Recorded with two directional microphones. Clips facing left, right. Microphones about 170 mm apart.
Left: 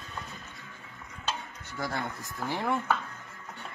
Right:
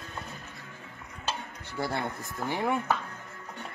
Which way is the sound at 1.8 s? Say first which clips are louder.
Right 2 dB; 30° right (ahead or behind).